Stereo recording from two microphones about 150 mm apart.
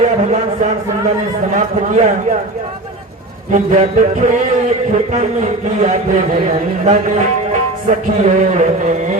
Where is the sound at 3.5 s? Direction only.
55° right (ahead or behind).